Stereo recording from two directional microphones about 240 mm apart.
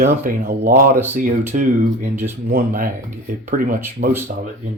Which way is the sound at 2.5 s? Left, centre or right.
Right.